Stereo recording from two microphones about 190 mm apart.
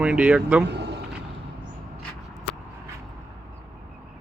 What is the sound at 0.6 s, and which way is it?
Speech, 60° right (ahead or behind).